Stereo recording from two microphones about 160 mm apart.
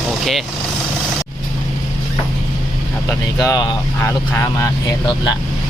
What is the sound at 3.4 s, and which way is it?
Speech, 20° left (ahead or behind).